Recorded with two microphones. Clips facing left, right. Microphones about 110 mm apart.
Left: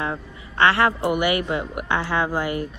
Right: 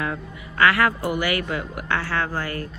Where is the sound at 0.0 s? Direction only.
25° left (ahead or behind).